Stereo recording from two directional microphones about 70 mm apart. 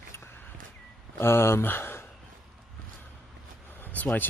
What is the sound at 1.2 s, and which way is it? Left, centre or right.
Speech, left.